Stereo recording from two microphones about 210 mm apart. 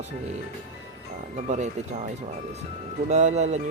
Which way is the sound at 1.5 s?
35° right (ahead or behind).